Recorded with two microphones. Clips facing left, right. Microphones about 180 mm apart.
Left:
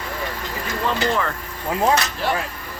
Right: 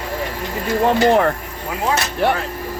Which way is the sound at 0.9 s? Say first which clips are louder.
Right 8 dB; 55° right (ahead or behind).